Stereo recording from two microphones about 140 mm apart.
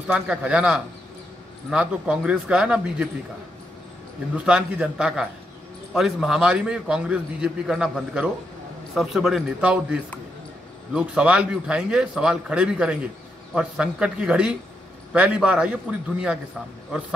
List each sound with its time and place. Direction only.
0.1 s a man's voice: 10° right (ahead or behind)
4.5 s a man's voice: 5° right (ahead or behind)